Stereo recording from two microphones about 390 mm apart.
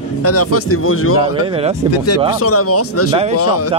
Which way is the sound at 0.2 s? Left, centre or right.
Left.